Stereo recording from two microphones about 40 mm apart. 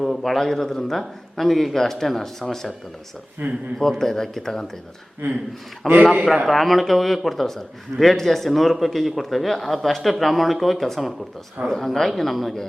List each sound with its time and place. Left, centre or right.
0.0 s a man's voice: centre
3.4 s speech: right
3.8 s a man's voice: centre
5.8 s speech: centre